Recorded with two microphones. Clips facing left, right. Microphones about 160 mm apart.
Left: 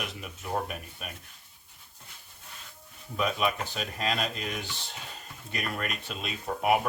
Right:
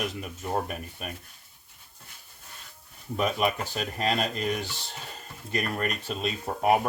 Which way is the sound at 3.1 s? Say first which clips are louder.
Right 2 dB; 45° right (ahead or behind).